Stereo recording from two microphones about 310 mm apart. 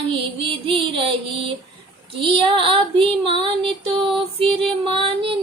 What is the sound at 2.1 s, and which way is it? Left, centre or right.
Female singing, centre.